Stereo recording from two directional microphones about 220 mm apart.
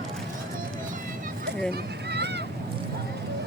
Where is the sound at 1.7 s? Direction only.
50° right (ahead or behind).